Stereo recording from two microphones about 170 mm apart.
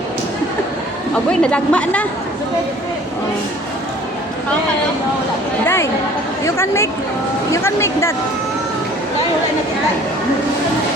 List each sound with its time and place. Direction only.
1.1 s a woman's voice: 5° left (ahead or behind)
5.6 s a sound: 15° left (ahead or behind)
6.4 s a woman's voice: 15° left (ahead or behind)